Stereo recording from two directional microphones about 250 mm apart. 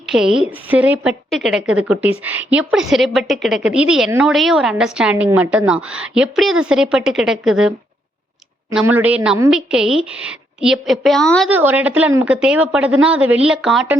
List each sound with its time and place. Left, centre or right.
0.0 s a woman's voice: centre
8.7 s a woman's voice: centre